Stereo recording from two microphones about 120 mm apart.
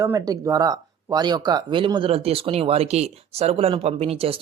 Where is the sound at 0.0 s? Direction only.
30° right (ahead or behind).